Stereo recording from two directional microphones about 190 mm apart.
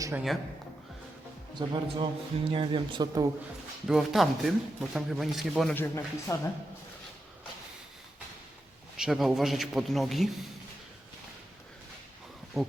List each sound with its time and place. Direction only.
1.5 s speech: 25° right (ahead or behind)
3.8 s speech: centre (ahead or behind)
5.7 s speech: 10° left (ahead or behind)
9.0 s speech: centre (ahead or behind)
12.6 s speech: centre (ahead or behind)